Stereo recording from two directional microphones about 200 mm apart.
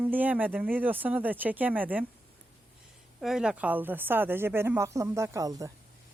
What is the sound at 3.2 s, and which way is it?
Speech, centre (ahead or behind).